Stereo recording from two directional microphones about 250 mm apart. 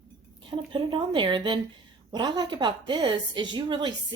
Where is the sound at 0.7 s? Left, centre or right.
Centre.